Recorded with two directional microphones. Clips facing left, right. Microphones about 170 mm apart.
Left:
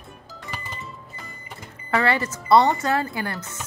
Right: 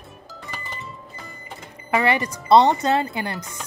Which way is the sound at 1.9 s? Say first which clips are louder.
Right 1 dB; 15° right (ahead or behind).